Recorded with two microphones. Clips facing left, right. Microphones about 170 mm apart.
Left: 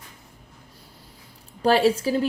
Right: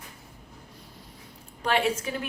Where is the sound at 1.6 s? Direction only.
35° left (ahead or behind).